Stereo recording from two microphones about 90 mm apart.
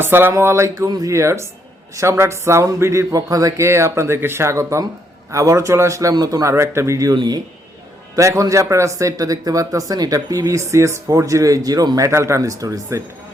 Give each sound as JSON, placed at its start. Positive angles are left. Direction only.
{"t": 0.0, "sound": "speech", "side_deg": -25}
{"t": 0.9, "sound": "speech", "side_deg": -40}
{"t": 7.2, "sound": "speech", "side_deg": -50}
{"t": 8.1, "sound": "speech", "side_deg": -35}